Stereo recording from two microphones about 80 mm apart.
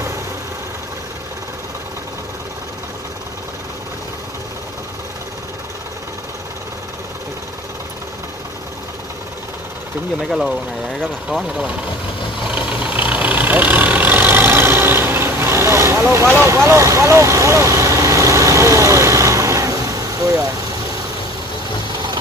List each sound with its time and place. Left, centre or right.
10.2 s speech: centre
11.2 s speech: centre
12.4 s vehicle: centre; by 16.0 s right
16.0 s speech: right
16.4 s vehicle: right